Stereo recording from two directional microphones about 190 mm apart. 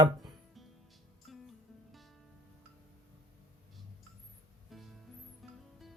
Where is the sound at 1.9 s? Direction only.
Centre (ahead or behind).